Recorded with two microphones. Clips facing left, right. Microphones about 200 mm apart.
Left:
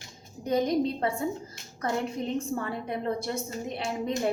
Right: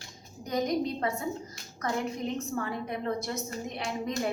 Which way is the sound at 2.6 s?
30° left (ahead or behind).